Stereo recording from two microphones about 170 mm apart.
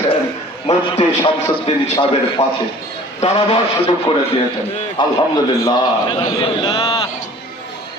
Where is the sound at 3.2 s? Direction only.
35° left (ahead or behind).